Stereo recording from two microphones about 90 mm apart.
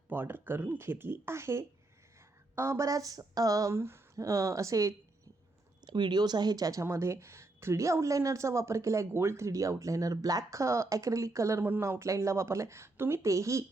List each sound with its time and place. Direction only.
0.1 s a woman's voice: 25° right (ahead or behind)
5.8 s speech: 55° right (ahead or behind)
6.8 s a woman's voice: 30° right (ahead or behind)